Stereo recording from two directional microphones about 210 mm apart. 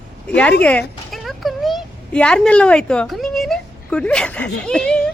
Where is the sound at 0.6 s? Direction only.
5° left (ahead or behind).